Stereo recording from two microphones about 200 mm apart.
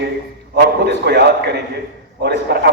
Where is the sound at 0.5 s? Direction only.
55° right (ahead or behind).